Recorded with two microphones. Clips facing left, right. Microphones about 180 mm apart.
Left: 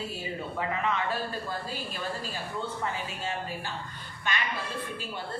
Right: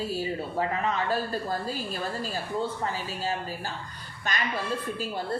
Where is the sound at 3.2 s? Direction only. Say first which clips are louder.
Right 3 dB; 35° right (ahead or behind).